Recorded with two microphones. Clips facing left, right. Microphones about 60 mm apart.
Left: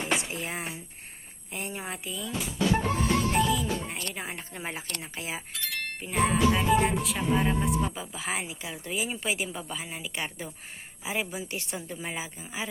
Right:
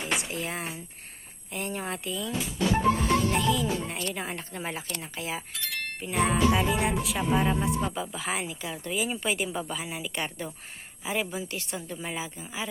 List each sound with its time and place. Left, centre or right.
0.0 s a sound: left
0.3 s speech: centre
2.1 s speech: centre; by 5.4 s left
5.5 s speech: centre
11.4 s speech: left